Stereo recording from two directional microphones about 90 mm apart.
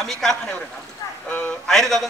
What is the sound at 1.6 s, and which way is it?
Speech, 5° left (ahead or behind).